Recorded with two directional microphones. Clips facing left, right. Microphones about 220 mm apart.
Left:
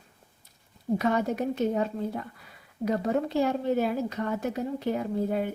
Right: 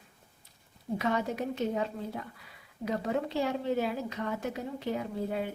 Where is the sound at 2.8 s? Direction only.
45° left (ahead or behind).